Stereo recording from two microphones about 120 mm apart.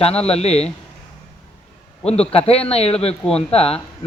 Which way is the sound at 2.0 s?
55° left (ahead or behind).